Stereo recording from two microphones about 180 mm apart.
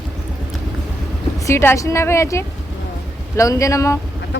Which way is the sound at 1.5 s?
15° left (ahead or behind).